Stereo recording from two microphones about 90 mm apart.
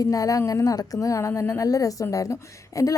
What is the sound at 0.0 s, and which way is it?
A woman's voice, 40° left (ahead or behind).